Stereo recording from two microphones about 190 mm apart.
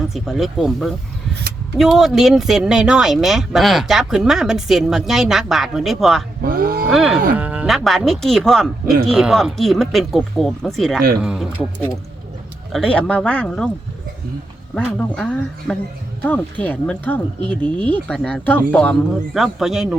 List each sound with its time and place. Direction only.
0.1 s speech: centre (ahead or behind)
6.4 s a sound: 50° right (ahead or behind)
6.9 s speech: centre (ahead or behind)
12.7 s speech: 5° left (ahead or behind)
14.8 s speech: 5° left (ahead or behind)